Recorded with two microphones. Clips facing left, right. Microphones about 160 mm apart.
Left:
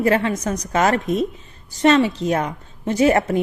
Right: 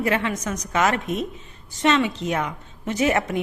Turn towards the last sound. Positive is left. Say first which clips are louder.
# left 5 dB
turn(degrees=35)  # may be behind; listen again after turning